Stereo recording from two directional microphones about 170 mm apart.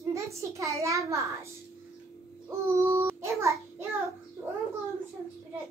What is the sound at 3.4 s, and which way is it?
Child singing, 15° right (ahead or behind).